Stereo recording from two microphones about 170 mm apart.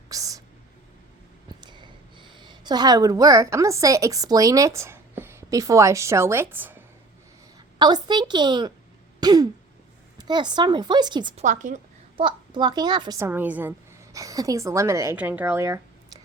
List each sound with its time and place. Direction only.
0.1 s whispering: 20° right (ahead or behind)
1.5 s a woman's voice: 25° right (ahead or behind)
7.8 s a woman's voice: 25° right (ahead or behind)
11.3 s a woman's voice: 45° right (ahead or behind)
12.1 s a woman's voice: 30° right (ahead or behind)